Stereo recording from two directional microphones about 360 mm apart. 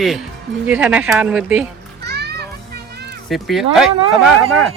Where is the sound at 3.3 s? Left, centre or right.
Centre.